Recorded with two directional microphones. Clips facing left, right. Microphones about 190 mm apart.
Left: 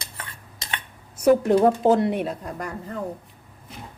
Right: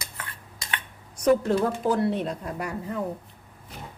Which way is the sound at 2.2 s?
Centre (ahead or behind).